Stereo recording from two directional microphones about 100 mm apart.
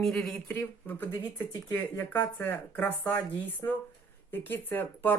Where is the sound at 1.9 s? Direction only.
20° left (ahead or behind).